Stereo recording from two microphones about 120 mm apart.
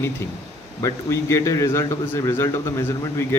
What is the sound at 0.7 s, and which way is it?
A man's voice, 25° left (ahead or behind).